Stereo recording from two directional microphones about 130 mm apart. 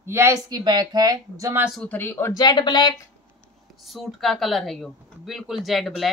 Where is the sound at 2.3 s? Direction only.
30° left (ahead or behind).